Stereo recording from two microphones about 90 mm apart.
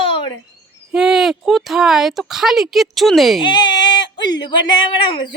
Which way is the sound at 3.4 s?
60° left (ahead or behind).